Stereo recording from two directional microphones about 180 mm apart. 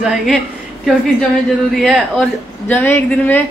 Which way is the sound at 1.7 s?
Centre (ahead or behind).